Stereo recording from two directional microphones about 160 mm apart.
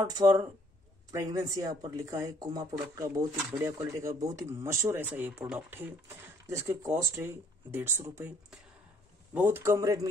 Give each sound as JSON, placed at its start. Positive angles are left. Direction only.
{"t": 0.0, "sound": "speech", "side_deg": -25}
{"t": 9.3, "sound": "speech", "side_deg": -10}